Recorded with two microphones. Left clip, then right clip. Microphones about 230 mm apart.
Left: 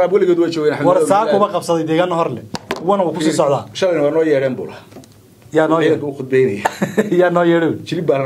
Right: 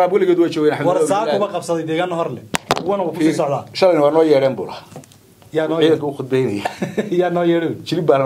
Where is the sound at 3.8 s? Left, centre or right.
Right.